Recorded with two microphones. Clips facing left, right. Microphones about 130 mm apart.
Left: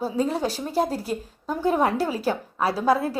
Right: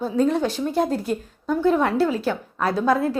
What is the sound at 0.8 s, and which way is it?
Speech, 5° left (ahead or behind).